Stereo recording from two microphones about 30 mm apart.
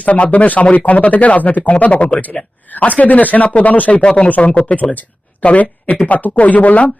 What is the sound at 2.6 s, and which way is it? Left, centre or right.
Speech, left.